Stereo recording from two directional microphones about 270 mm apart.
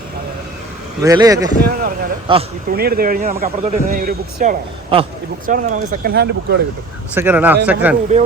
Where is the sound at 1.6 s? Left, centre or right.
Right.